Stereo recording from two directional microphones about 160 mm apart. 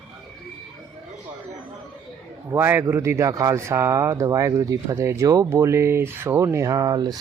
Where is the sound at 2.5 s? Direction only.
15° right (ahead or behind).